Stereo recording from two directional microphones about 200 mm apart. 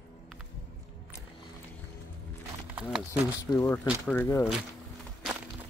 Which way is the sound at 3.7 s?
5° left (ahead or behind).